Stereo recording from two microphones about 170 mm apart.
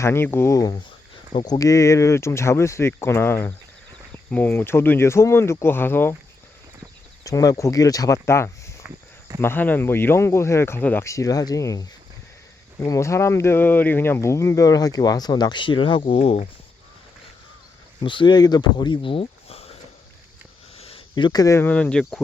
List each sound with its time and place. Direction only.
0.0 s speech: 15° left (ahead or behind)
7.3 s speech: 20° left (ahead or behind); by 16.5 s 35° left (ahead or behind)
18.0 s speech: 30° left (ahead or behind)
20.7 s speech: 35° left (ahead or behind); by 22.2 s 5° left (ahead or behind)